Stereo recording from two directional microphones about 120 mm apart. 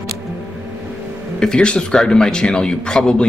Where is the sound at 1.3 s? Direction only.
5° left (ahead or behind).